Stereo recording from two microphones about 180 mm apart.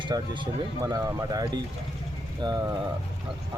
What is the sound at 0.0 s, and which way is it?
Speech, 25° right (ahead or behind).